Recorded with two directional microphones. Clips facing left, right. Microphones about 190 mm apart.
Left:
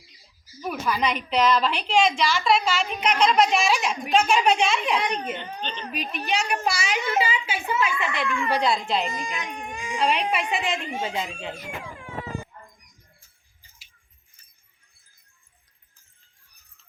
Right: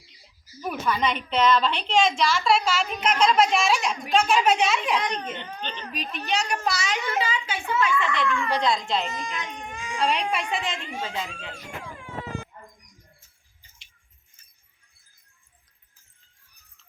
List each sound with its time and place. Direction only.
0.6 s a woman's voice: centre (ahead or behind)
4.9 s speech: 10° left (ahead or behind)
10.0 s a woman's voice: centre (ahead or behind)
10.9 s speech: 20° left (ahead or behind)